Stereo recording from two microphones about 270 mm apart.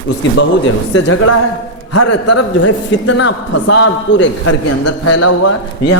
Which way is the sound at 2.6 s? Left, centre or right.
Left.